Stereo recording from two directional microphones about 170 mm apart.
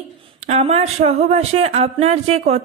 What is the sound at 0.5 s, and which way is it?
Speech, 35° right (ahead or behind).